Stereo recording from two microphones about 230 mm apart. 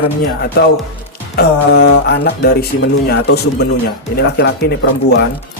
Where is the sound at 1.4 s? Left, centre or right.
Left.